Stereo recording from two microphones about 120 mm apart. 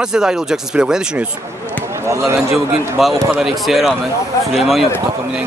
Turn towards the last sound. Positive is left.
turn(degrees=0)  # may be behind; listen again after turning